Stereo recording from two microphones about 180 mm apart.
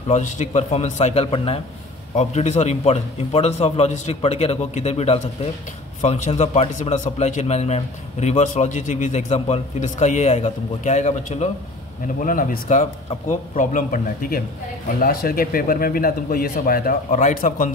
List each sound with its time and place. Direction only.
0.1 s a man's voice: 40° left (ahead or behind)